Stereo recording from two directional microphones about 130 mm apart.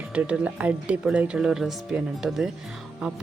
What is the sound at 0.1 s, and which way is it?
A woman's voice, 10° right (ahead or behind).